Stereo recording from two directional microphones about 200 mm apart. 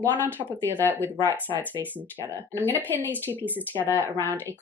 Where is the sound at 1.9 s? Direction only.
10° right (ahead or behind).